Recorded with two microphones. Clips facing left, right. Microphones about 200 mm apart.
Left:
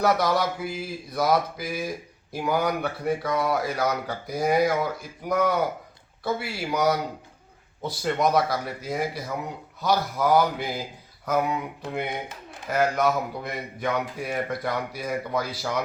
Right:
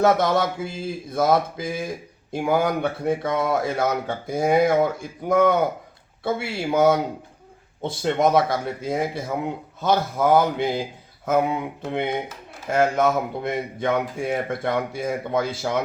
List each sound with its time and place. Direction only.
0.0 s a man's voice: 25° right (ahead or behind)